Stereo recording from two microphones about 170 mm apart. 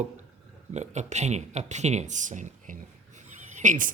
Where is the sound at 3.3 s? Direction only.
45° right (ahead or behind).